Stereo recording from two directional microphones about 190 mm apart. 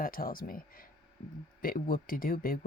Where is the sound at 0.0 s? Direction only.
50° left (ahead or behind).